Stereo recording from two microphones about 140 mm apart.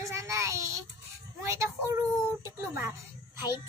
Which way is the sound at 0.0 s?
20° right (ahead or behind).